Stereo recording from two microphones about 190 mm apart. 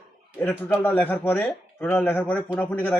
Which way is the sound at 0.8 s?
10° left (ahead or behind).